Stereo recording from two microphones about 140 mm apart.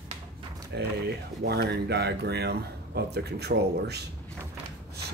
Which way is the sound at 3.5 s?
90° right.